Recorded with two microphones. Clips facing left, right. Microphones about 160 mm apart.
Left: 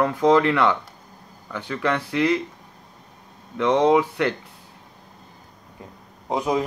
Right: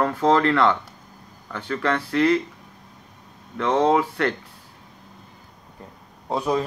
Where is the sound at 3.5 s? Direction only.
15° left (ahead or behind).